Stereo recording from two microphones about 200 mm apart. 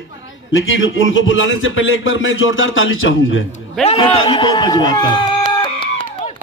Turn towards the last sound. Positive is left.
turn(degrees=25)  # may be behind; listen again after turning